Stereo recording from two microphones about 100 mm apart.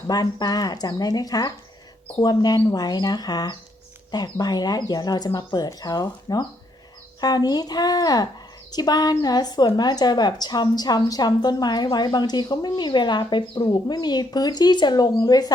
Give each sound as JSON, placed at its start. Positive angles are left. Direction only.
{"t": 0.1, "sound": "a woman's voice", "side_deg": 40}